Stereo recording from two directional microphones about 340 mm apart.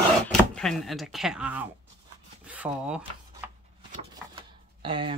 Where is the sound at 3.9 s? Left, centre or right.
Centre.